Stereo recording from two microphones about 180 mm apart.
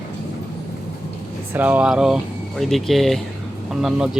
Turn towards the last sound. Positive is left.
turn(degrees=0)  # may be behind; listen again after turning